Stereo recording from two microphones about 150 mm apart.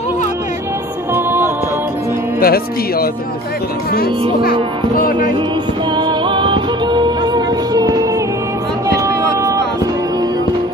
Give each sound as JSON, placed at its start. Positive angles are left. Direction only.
{"t": 1.1, "sound": "music", "side_deg": -15}
{"t": 2.4, "sound": "speech", "side_deg": 90}
{"t": 5.9, "sound": "music", "side_deg": -30}
{"t": 8.8, "sound": "a sound", "side_deg": -20}